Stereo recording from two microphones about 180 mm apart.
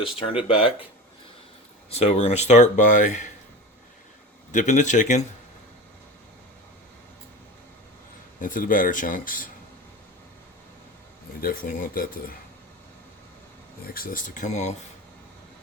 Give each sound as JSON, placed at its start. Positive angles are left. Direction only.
{"t": 0.3, "sound": "speech", "side_deg": 30}
{"t": 1.9, "sound": "speech", "side_deg": 35}
{"t": 4.5, "sound": "speech", "side_deg": 45}
{"t": 8.4, "sound": "speech", "side_deg": 50}
{"t": 11.3, "sound": "speech", "side_deg": 55}
{"t": 13.8, "sound": "speech", "side_deg": 55}